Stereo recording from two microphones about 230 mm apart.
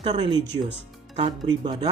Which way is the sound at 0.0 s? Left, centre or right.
Right.